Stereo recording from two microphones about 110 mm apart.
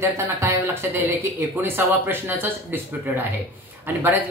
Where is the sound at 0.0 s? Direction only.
25° right (ahead or behind).